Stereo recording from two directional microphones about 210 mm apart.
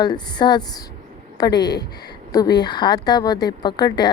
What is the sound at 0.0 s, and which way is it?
A woman's voice, 20° left (ahead or behind).